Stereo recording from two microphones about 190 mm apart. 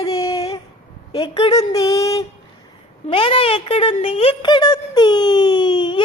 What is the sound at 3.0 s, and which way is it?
Speech, 30° left (ahead or behind).